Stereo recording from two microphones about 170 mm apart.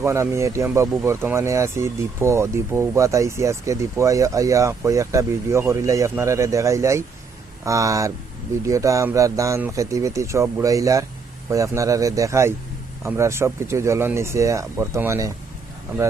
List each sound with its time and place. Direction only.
0.0 s speech: 15° right (ahead or behind)